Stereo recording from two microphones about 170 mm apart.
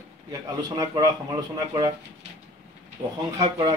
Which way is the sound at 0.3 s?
20° right (ahead or behind).